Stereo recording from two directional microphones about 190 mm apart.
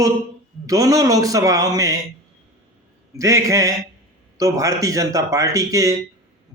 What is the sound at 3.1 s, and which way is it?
A man's voice, 15° right (ahead or behind).